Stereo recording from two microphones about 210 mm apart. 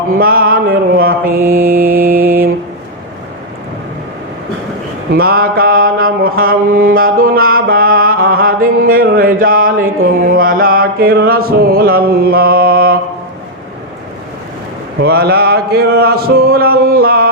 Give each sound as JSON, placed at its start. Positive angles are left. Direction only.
{"t": 0.2, "sound": "mantra", "side_deg": -45}
{"t": 5.1, "sound": "mantra", "side_deg": -45}
{"t": 15.0, "sound": "a sound", "side_deg": -50}